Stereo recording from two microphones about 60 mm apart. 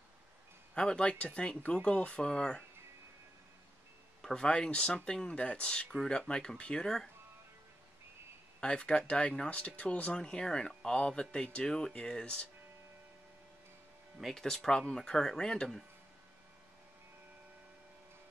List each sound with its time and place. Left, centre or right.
0.7 s speech: centre
4.2 s speech: centre
8.5 s speech: centre
14.2 s speech: centre